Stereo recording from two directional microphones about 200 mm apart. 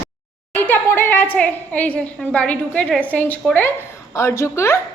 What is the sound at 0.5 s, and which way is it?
A woman's voice, 10° left (ahead or behind).